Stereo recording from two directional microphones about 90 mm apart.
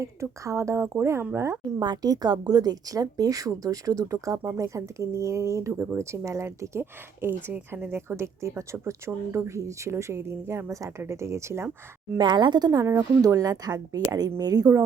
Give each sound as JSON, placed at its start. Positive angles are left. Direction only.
{"t": 0.0, "sound": "speech", "side_deg": -35}
{"t": 1.8, "sound": "speech", "side_deg": -50}
{"t": 5.7, "sound": "speech", "side_deg": -20}
{"t": 12.1, "sound": "speech", "side_deg": -55}
{"t": 12.8, "sound": "speech", "side_deg": -40}